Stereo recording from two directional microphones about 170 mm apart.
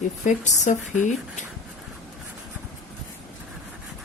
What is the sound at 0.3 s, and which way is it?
Speech, 45° left (ahead or behind).